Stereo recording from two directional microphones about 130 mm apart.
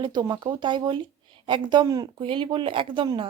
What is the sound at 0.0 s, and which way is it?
Speech, 30° right (ahead or behind).